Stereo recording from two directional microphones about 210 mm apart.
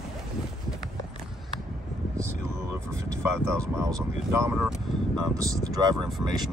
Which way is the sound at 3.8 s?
15° right (ahead or behind).